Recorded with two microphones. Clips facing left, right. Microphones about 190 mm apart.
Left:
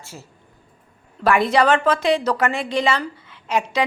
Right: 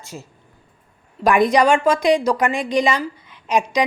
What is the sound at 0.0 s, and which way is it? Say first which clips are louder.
A woman's voice: right 4 dB; 15° right (ahead or behind).